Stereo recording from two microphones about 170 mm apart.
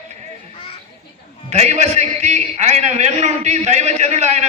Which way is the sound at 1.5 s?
40° right (ahead or behind).